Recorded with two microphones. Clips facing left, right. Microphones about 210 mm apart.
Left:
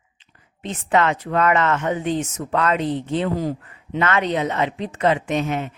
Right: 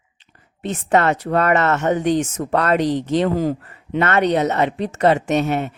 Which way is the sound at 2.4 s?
40° right (ahead or behind).